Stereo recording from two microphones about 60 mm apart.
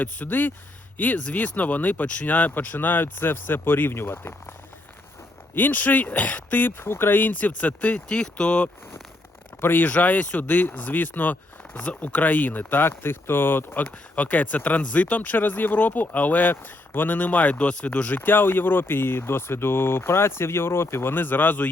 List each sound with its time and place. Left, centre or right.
0.0 s speech: left
5.5 s speech: left
9.6 s speech: left
9.9 s speech: left
13.8 s speech: left